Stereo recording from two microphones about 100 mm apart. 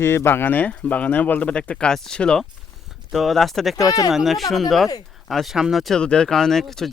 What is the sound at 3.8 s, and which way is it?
Speech, 35° left (ahead or behind).